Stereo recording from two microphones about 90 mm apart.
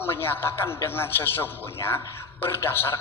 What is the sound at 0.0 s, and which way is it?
A man's voice, 25° left (ahead or behind).